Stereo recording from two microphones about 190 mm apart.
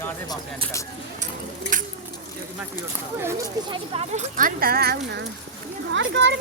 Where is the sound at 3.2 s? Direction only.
20° right (ahead or behind); by 5.3 s 60° right (ahead or behind).